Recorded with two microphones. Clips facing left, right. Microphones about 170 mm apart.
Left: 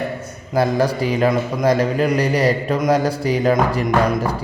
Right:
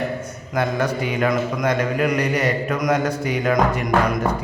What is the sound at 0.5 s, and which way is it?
A man's voice, 35° left (ahead or behind).